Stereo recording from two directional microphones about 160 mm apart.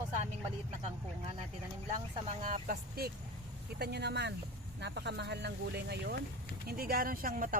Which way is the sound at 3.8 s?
90° right.